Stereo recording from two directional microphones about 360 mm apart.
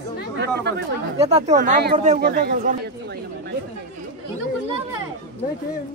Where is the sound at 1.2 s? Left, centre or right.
Centre.